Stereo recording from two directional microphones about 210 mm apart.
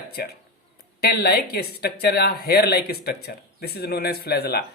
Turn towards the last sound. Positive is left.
turn(degrees=50)  # may be behind; listen again after turning